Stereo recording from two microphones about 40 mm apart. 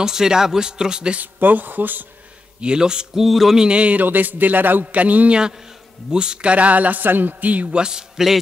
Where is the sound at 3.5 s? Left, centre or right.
Right.